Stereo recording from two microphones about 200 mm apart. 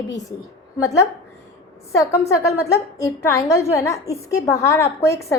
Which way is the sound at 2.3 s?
15° left (ahead or behind).